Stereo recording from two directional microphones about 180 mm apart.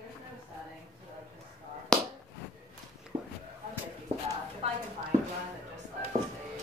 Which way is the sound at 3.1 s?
25° right (ahead or behind).